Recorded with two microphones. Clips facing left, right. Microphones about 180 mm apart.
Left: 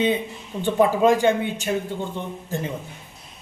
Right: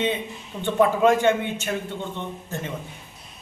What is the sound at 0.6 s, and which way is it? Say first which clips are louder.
Speech: left 1 dB; 15° left (ahead or behind).